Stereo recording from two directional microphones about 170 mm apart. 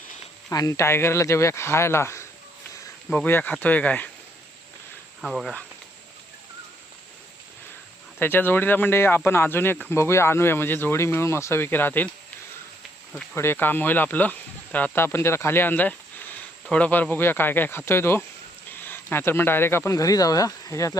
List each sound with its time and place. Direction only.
0.5 s speech: 20° left (ahead or behind)
5.2 s speech: centre (ahead or behind)
8.2 s speech: 10° left (ahead or behind)
13.3 s speech: 15° left (ahead or behind)